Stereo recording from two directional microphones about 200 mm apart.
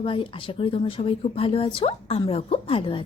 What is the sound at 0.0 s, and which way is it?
A woman's voice, 25° left (ahead or behind).